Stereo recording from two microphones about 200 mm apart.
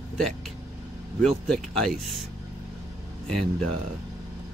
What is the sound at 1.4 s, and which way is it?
Speech, centre (ahead or behind).